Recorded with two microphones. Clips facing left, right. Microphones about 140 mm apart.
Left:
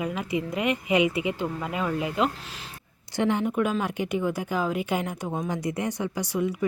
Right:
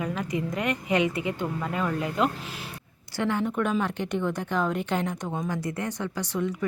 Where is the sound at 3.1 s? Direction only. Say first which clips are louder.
Left 2 dB; 15° left (ahead or behind).